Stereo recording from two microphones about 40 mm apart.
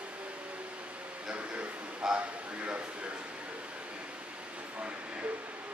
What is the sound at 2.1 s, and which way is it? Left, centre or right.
Speech, right.